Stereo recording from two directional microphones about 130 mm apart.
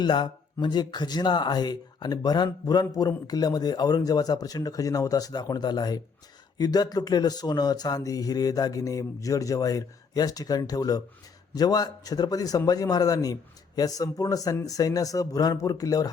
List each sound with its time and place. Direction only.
0.0 s a man's voice: 35° left (ahead or behind)